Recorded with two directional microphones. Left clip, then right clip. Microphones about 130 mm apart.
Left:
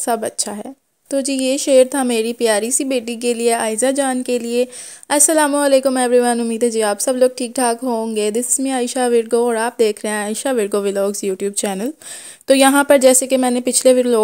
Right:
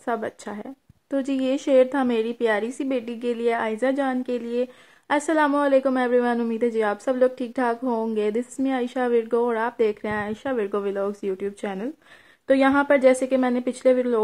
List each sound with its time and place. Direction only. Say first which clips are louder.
0.0 s a woman's voice: left 8 dB; 40° left (ahead or behind)
1.1 s a woman's voice: left 6 dB; 25° left (ahead or behind)
4.0 s a woman's voice: left 7 dB; 55° left (ahead or behind)
5.1 s a woman's voice: left 6 dB; 35° left (ahead or behind)
6.6 s a woman's voice: left 7 dB; 30° left (ahead or behind)
8.8 s a woman's voice: left 8 dB; 35° left (ahead or behind)
10.3 s speech: left 7 dB; 60° left (ahead or behind)
13.3 s a woman's voice: left 6 dB; 45° left (ahead or behind)
13.7 s speech: left 9 dB; 65° left (ahead or behind)